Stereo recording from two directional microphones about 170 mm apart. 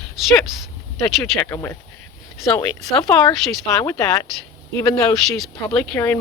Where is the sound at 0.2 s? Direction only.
Centre (ahead or behind).